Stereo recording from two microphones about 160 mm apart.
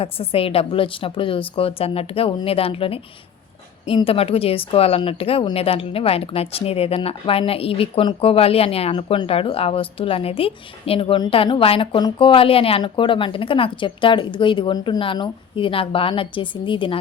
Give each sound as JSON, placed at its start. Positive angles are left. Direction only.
{"t": 0.0, "sound": "a woman's voice", "side_deg": 35}